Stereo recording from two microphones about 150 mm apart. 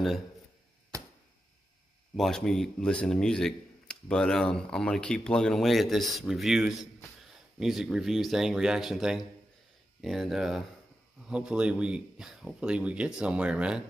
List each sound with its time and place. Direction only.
0.9 s arrow: 20° right (ahead or behind)
2.1 s speech: centre (ahead or behind)